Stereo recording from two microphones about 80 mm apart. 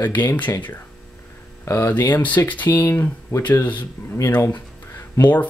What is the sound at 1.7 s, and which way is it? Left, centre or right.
Speech, left.